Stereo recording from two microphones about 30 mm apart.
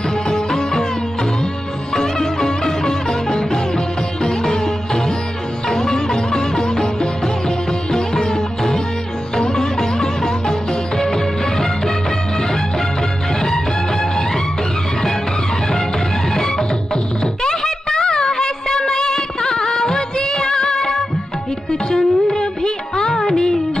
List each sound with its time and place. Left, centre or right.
0.3 s music: centre
2.0 s music: centre
16.3 s music: left